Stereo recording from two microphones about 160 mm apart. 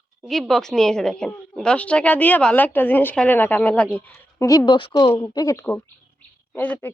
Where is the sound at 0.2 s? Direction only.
Centre (ahead or behind).